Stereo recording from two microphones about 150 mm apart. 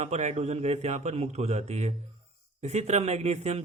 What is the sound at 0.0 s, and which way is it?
A man's voice, 50° right (ahead or behind).